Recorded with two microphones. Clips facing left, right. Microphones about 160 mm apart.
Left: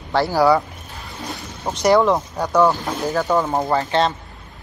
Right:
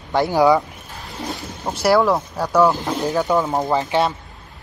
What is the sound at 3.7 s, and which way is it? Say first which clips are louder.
Speech: even; 15° right (ahead or behind).